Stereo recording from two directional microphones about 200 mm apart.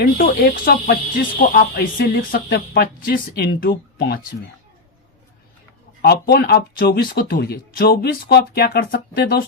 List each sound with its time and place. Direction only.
0.0 s speech: 50° left (ahead or behind)
6.0 s speech: 50° left (ahead or behind)